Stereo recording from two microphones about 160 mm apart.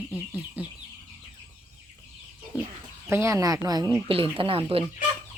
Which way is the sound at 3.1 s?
20° right (ahead or behind).